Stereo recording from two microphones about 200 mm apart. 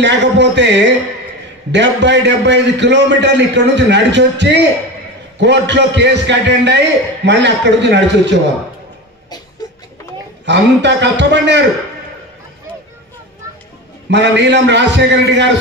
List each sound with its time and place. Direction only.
0.0 s a man's voice: 60° right (ahead or behind)
10.4 s a man's voice: 60° right (ahead or behind)
14.1 s a man's voice: 60° right (ahead or behind)